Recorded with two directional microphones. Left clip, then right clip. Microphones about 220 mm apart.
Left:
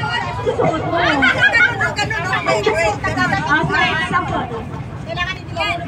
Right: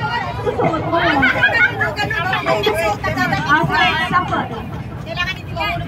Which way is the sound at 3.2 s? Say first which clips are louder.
Right 1 dB; 35° right (ahead or behind).